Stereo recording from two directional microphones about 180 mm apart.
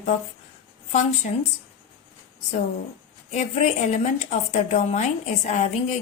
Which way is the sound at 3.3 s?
40° left (ahead or behind).